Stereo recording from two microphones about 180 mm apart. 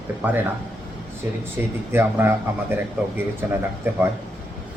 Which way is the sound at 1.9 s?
10° right (ahead or behind).